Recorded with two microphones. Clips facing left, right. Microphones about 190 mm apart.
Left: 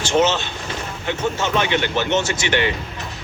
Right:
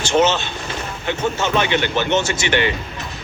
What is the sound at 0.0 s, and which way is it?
Vehicle, 65° right (ahead or behind).